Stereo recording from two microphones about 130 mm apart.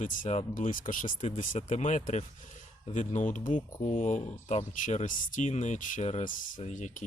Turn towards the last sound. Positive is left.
turn(degrees=80)